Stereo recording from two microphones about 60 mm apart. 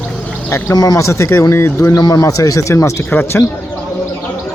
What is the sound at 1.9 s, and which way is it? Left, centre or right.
Speech, left.